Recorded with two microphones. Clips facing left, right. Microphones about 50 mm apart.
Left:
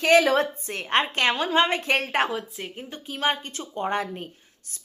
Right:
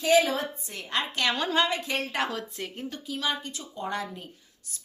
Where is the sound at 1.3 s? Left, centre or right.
Left.